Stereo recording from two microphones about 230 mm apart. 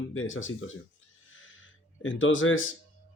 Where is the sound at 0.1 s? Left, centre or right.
Left.